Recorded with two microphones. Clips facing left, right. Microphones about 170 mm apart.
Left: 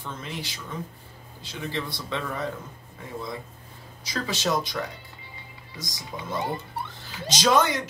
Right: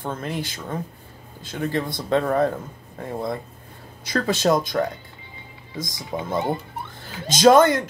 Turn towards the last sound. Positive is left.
turn(degrees=-50)  # may be behind; listen again after turning